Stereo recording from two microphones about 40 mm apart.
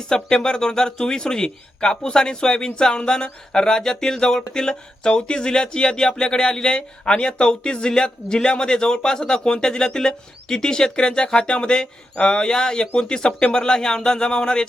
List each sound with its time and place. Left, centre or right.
0.1 s speech: centre